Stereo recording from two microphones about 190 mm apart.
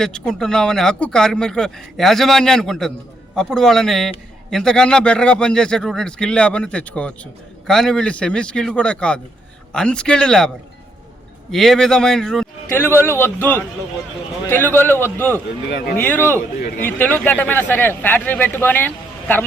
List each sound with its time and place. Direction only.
0.0 s speech: 5° left (ahead or behind)
11.5 s speech: centre (ahead or behind)
16.6 s a man's voice: 50° left (ahead or behind)
16.8 s speech: 10° left (ahead or behind)